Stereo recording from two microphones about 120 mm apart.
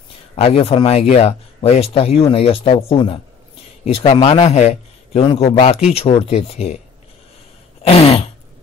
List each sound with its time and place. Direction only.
0.4 s speech: 55° left (ahead or behind)
3.8 s a man's voice: 60° left (ahead or behind)
5.4 s a man's voice: 50° left (ahead or behind)
7.8 s speech: 55° left (ahead or behind)